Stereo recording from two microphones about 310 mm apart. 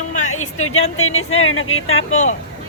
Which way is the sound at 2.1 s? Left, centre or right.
Left.